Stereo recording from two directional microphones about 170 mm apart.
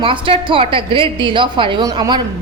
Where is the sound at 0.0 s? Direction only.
30° right (ahead or behind).